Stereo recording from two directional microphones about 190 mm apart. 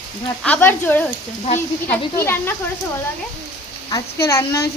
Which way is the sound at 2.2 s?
10° left (ahead or behind).